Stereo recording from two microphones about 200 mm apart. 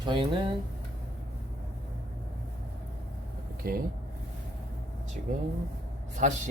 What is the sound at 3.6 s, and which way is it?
Speech, 45° right (ahead or behind).